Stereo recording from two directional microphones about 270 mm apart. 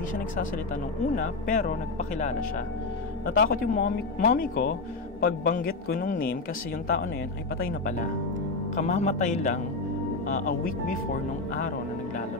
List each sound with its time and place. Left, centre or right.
1.5 s speech: left
3.3 s speech: left
7.5 s speech: left